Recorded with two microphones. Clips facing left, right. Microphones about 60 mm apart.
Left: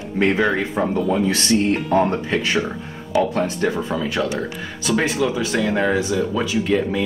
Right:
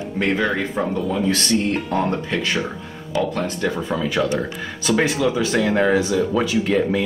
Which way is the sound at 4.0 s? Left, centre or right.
Centre.